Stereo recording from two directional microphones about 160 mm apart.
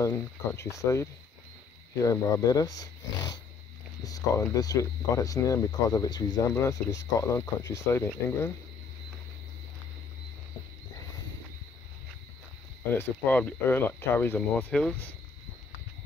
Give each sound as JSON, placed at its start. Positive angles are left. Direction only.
{"t": 0.0, "sound": "speech", "side_deg": 15}
{"t": 2.0, "sound": "speech", "side_deg": 20}
{"t": 12.9, "sound": "speech", "side_deg": 10}